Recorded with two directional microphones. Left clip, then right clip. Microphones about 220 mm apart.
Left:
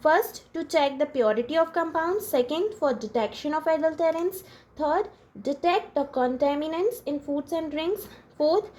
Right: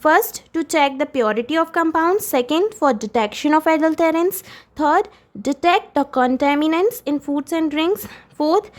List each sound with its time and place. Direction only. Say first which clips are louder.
0.0 s a woman's voice: right 6 dB; 40° right (ahead or behind)